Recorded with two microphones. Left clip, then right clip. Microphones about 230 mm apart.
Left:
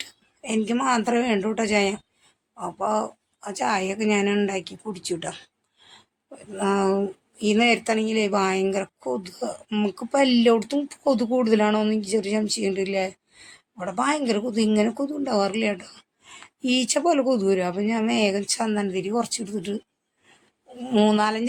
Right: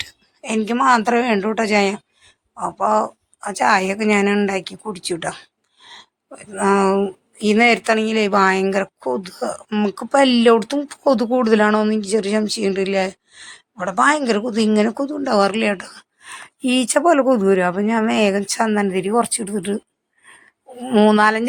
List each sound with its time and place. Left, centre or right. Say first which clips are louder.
0.0 s speech: right 6 dB; centre